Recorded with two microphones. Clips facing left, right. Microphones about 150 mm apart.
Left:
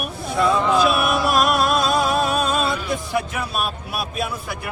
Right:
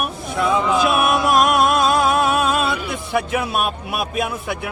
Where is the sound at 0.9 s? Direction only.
50° right (ahead or behind).